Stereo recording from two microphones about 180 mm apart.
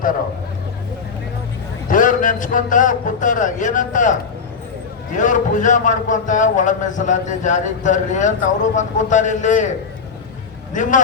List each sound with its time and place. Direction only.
1.9 s a man's voice: 45° left (ahead or behind)
10.8 s a man's voice: 45° left (ahead or behind)